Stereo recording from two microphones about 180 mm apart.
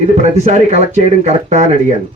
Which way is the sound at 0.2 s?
40° right (ahead or behind).